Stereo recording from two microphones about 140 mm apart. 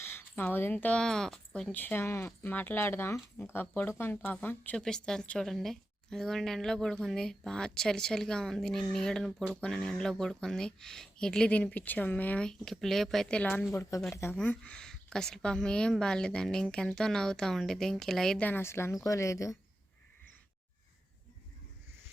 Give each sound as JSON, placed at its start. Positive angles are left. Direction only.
{"t": 0.0, "sound": "speech", "side_deg": 15}
{"t": 14.3, "sound": "speech", "side_deg": 10}